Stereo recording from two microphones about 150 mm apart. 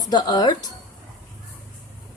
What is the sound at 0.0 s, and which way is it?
Speech, 25° left (ahead or behind).